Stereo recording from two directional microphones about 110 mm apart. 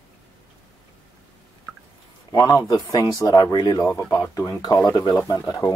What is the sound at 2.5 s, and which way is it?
Speech, 35° left (ahead or behind).